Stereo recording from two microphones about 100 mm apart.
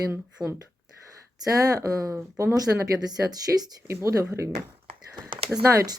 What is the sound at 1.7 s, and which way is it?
Speech, 35° right (ahead or behind).